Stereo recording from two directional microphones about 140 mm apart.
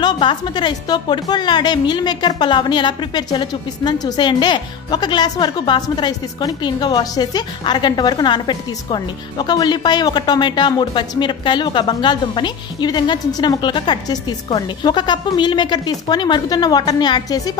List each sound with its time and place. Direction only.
0.0 s a woman's voice: 35° left (ahead or behind)